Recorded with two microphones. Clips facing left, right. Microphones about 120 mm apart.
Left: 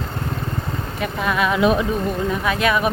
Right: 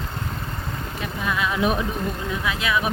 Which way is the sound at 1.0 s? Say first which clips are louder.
Left 5 dB; 65° left (ahead or behind).